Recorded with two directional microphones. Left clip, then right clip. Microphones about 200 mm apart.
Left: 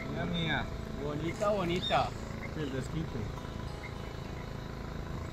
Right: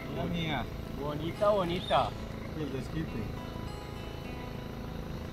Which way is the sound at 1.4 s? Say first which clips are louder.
Right 4 dB; 50° right (ahead or behind).